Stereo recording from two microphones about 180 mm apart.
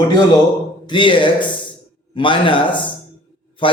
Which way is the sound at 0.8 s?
25° left (ahead or behind).